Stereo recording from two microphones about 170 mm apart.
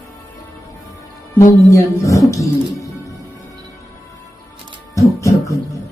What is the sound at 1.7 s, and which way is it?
Speech, 20° left (ahead or behind).